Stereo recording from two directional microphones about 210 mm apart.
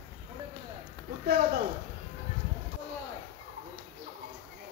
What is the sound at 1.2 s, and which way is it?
Speech, 45° right (ahead or behind).